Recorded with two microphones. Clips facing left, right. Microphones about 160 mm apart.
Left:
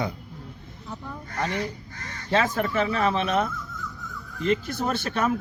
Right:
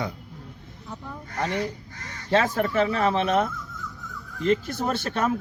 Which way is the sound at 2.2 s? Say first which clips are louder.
Right 2 dB; 45° right (ahead or behind).